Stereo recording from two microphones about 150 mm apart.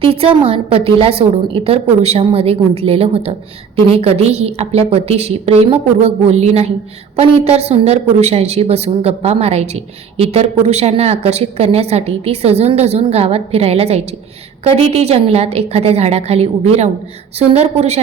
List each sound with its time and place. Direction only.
0.0 s a woman's voice: 40° right (ahead or behind)